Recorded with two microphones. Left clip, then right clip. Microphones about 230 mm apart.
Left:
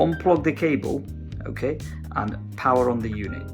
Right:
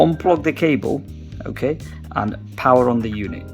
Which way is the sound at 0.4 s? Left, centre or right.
Right.